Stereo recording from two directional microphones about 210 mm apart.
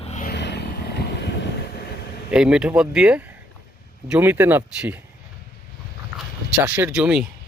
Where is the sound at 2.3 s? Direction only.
5° right (ahead or behind).